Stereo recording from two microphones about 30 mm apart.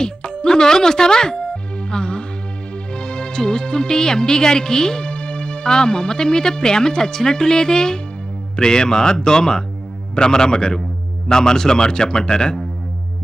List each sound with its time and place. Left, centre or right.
0.0 s music: left
2.9 s speech: left